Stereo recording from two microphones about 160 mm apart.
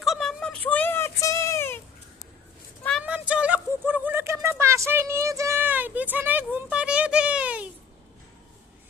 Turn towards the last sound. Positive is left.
turn(degrees=-10)  # may be behind; listen again after turning